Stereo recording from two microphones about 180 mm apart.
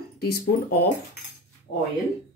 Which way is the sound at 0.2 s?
60° left (ahead or behind).